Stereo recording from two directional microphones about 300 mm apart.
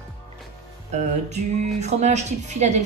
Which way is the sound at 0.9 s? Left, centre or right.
Right.